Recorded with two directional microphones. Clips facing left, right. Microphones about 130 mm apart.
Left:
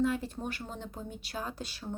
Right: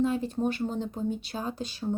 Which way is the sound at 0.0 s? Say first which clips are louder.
Right 5 dB; 20° right (ahead or behind).